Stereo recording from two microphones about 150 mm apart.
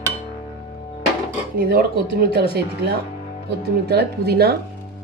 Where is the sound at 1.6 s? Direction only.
90° right.